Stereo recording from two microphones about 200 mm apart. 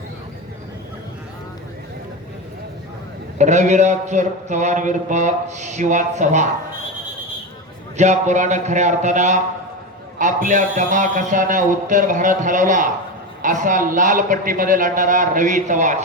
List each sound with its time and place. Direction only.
3.3 s speech: 35° right (ahead or behind)
7.9 s speech: 35° right (ahead or behind)